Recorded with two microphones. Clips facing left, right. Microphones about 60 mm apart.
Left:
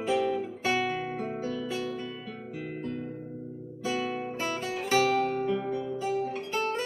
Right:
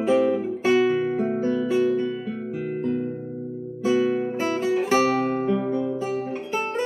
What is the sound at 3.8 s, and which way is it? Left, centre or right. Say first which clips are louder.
Guitar: right 10 dB; centre.